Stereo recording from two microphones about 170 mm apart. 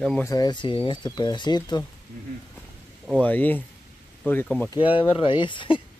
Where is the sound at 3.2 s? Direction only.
10° left (ahead or behind).